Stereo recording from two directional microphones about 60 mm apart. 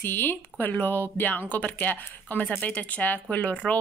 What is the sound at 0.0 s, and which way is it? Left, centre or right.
A woman's voice, left.